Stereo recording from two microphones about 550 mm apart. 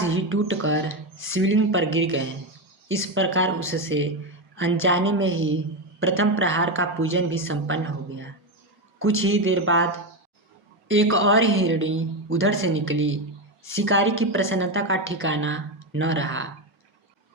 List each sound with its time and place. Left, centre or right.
0.1 s a woman's voice: right
10.8 s a woman's voice: right